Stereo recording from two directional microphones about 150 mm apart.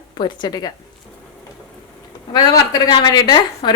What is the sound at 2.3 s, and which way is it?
Speech, 25° left (ahead or behind).